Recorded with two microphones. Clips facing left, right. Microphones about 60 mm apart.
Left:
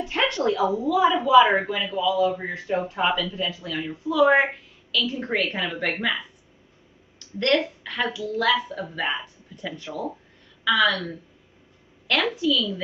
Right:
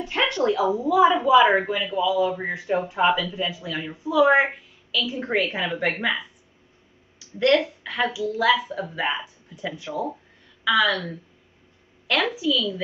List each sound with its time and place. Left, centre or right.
0.0 s a sound: centre
0.4 s a woman's voice: centre
7.2 s a woman's voice: centre